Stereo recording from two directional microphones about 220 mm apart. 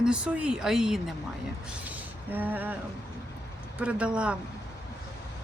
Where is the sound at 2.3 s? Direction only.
10° right (ahead or behind).